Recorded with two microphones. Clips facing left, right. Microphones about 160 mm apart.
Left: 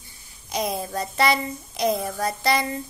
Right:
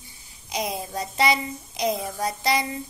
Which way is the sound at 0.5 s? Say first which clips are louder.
Left 2 dB; 15° right (ahead or behind).